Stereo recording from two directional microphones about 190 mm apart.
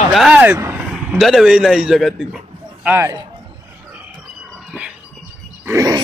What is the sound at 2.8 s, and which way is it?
Speech, 15° right (ahead or behind).